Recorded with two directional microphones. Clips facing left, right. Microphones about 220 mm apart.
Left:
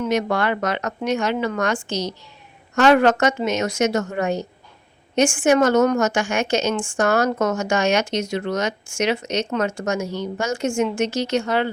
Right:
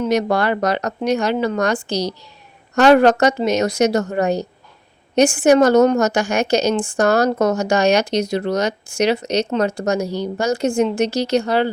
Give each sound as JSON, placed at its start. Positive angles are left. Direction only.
{"t": 0.0, "sound": "a woman's voice", "side_deg": -35}